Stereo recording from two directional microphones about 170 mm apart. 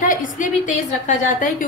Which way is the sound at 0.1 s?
50° left (ahead or behind).